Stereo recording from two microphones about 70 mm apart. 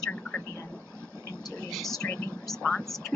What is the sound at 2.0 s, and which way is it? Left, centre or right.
Speech, centre.